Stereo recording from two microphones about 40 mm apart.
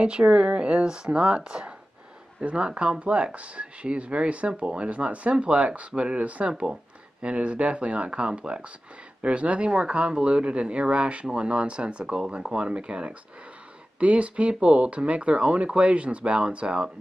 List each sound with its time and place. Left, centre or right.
0.0 s speech: right